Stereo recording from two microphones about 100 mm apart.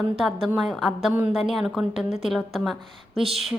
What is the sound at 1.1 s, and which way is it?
A woman's voice, 15° right (ahead or behind).